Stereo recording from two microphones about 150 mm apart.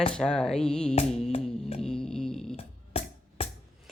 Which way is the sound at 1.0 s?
45° left (ahead or behind).